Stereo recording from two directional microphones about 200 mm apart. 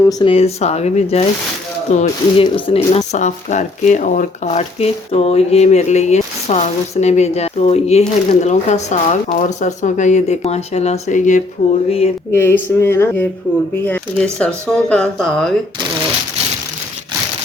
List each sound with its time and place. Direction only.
0.0 s speech: 20° left (ahead or behind)
1.9 s ratchet: 30° left (ahead or behind)
3.1 s speech: 35° left (ahead or behind)
11.9 s ratchet: 30° left (ahead or behind)
12.3 s speech: 10° left (ahead or behind)